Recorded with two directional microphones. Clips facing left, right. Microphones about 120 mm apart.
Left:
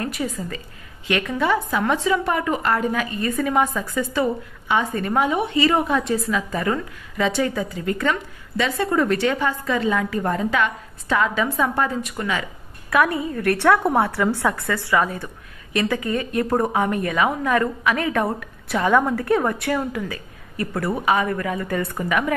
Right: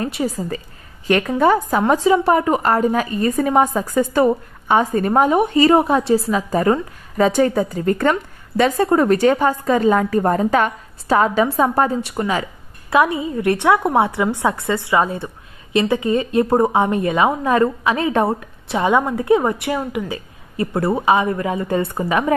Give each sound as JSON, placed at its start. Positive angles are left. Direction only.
{"t": 0.0, "sound": "a woman's voice", "side_deg": -30}
{"t": 12.9, "sound": "a woman's voice", "side_deg": -20}